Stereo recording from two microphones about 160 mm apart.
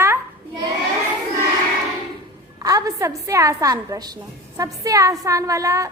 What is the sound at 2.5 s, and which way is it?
A woman's voice, 20° right (ahead or behind).